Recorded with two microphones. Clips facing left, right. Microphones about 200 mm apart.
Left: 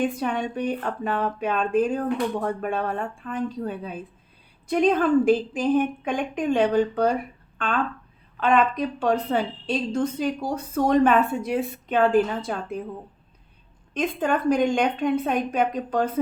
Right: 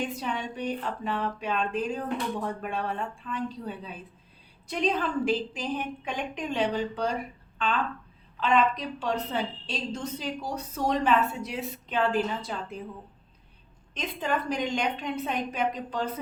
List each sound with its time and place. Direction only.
0.0 s a woman's voice: 55° left (ahead or behind)
8.4 s a woman's voice: 55° left (ahead or behind)
13.9 s a woman's voice: 50° left (ahead or behind)